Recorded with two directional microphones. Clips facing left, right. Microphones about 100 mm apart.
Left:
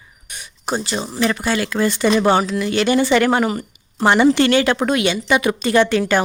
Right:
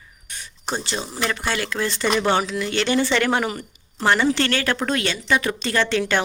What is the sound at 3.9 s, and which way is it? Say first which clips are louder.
A woman's voice: left 6 dB; 15° left (ahead or behind).